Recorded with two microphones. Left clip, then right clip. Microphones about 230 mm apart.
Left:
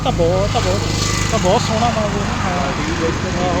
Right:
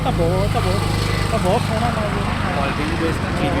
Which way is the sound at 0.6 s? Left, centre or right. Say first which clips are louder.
Left 3 dB; left.